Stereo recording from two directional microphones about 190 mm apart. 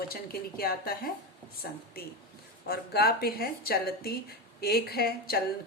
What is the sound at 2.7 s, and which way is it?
A woman's voice, 55° left (ahead or behind).